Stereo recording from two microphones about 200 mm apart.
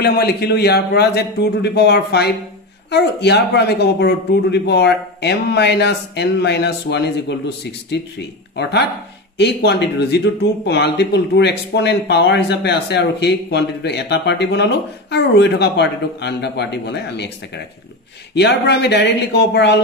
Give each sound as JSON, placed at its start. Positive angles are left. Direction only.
{"t": 0.0, "sound": "speech", "side_deg": 50}
{"t": 18.3, "sound": "speech", "side_deg": 55}